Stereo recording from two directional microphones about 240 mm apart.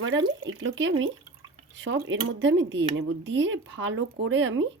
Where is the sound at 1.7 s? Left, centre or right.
Right.